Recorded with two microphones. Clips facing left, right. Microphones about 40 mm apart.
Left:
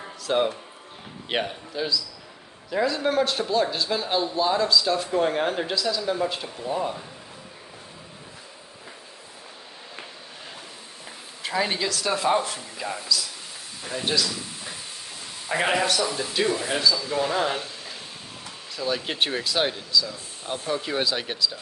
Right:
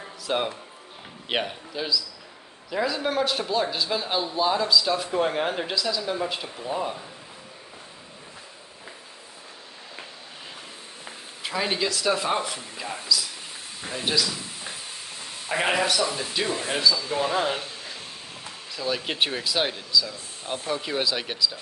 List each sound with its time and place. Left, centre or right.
0.3 s a man's voice: centre
11.4 s a man's voice: centre
13.8 s a man's voice: centre
15.4 s a man's voice: centre
16.4 s speech: right
17.4 s a man's voice: centre
18.8 s a man's voice: centre